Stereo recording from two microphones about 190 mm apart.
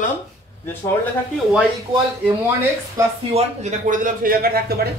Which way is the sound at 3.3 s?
40° right (ahead or behind).